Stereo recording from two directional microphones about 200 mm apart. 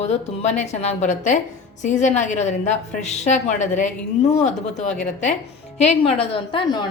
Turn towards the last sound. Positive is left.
turn(degrees=25)  # may be behind; listen again after turning